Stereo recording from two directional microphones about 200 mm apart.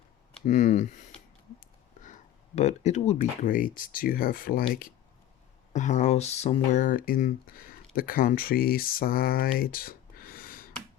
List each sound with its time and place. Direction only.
0.4 s speech: 40° left (ahead or behind)
2.6 s speech: 35° left (ahead or behind)
5.7 s speech: 35° left (ahead or behind)